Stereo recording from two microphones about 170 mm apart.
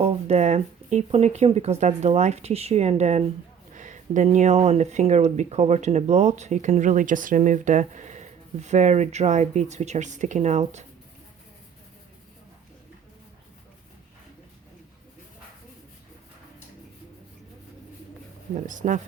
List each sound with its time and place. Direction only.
0.0 s speech: 35° right (ahead or behind)
18.5 s speech: 50° right (ahead or behind)